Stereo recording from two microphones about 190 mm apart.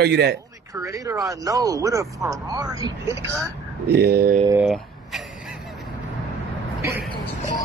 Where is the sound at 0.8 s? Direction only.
15° right (ahead or behind).